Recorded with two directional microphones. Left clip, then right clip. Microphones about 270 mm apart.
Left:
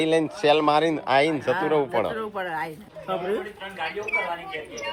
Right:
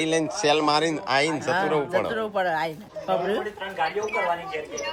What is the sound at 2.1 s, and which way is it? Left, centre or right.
Speech, right.